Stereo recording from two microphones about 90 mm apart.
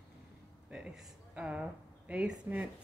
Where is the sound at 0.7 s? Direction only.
5° right (ahead or behind).